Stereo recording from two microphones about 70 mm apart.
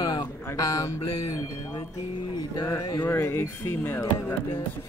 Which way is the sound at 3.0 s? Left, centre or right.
Left.